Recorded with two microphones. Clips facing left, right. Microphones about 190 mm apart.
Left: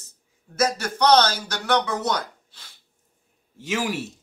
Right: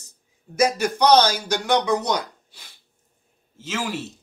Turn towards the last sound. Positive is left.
turn(degrees=15)  # may be behind; listen again after turning